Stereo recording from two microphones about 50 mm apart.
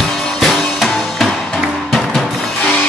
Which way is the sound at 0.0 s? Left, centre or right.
Centre.